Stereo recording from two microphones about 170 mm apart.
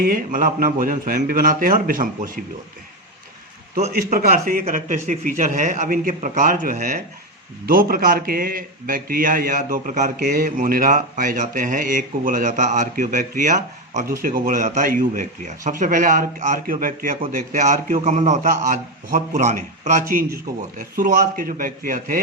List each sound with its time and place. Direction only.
0.0 s speech: 55° right (ahead or behind)
4.1 s speech: 60° right (ahead or behind)